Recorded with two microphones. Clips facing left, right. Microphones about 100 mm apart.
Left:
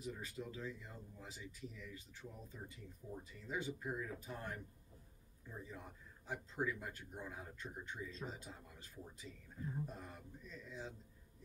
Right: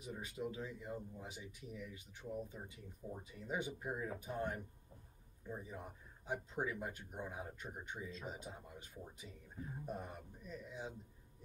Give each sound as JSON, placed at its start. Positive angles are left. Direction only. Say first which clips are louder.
{"t": 0.0, "sound": "a man's voice", "louder": "right 2 dB", "side_deg": -15}